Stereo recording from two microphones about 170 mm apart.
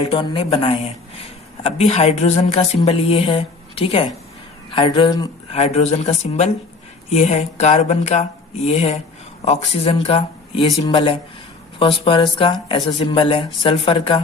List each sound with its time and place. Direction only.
0.0 s a woman's voice: 35° left (ahead or behind)
5.5 s a woman's voice: 40° left (ahead or behind)